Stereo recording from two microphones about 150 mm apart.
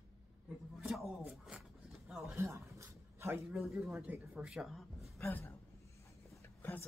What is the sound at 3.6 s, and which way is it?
Speech, centre (ahead or behind).